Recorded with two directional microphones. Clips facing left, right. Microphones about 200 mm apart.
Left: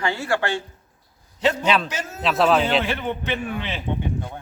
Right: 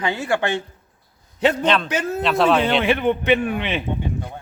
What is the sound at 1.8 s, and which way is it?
Speech, 60° right (ahead or behind).